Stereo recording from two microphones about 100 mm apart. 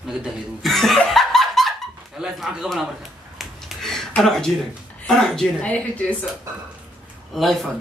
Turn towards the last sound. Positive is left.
turn(degrees=0)  # may be behind; listen again after turning